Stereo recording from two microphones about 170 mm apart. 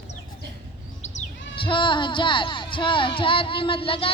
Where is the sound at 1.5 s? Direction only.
30° left (ahead or behind).